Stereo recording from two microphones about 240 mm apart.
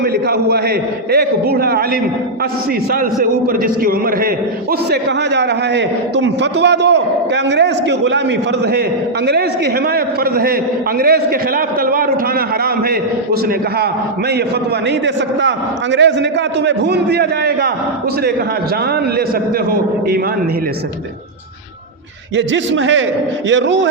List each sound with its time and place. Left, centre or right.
0.0 s a man's voice: right
9.2 s a man's voice: right
14.8 s a man's voice: right
22.4 s a man's voice: right